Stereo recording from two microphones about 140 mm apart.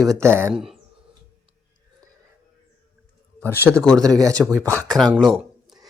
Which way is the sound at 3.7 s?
5° left (ahead or behind).